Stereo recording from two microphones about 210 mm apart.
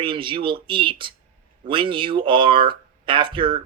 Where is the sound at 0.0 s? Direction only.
25° right (ahead or behind).